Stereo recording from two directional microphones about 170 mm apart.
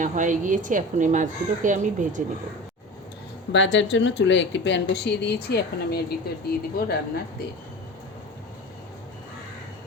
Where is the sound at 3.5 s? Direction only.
90° left; by 6.0 s 75° left (ahead or behind).